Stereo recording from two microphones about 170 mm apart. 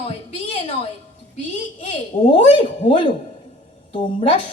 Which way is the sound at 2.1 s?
50° left (ahead or behind).